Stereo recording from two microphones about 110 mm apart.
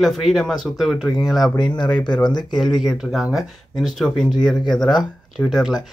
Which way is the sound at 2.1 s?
40° left (ahead or behind).